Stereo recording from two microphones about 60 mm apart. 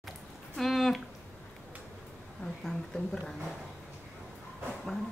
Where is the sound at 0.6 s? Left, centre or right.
Centre.